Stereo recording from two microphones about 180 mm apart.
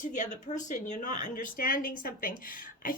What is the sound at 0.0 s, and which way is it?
A woman's voice, 40° left (ahead or behind).